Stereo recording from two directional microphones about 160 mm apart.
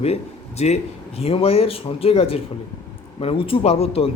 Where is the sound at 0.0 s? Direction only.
40° left (ahead or behind).